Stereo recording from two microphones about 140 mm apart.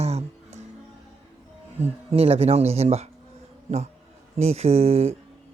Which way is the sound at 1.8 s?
45° right (ahead or behind).